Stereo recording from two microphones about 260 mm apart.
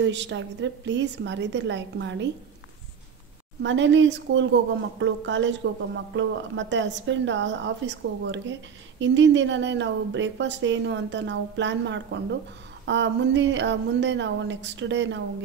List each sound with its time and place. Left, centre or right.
0.0 s a woman's voice: right
3.6 s a woman's voice: right